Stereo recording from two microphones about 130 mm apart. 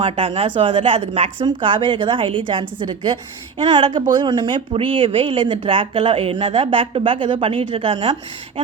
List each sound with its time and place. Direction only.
0.0 s a woman's voice: 45° right (ahead or behind)